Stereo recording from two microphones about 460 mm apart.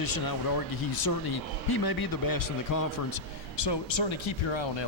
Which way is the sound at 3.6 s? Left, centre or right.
Left.